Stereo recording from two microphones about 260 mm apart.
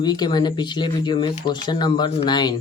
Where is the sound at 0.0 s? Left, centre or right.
Centre.